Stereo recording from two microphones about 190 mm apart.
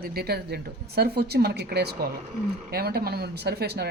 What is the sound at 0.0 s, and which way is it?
Speech, 55° right (ahead or behind).